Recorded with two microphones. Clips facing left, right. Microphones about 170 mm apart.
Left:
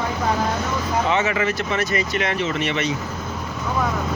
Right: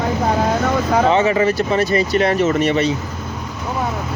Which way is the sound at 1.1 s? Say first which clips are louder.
Right 5 dB; 35° right (ahead or behind).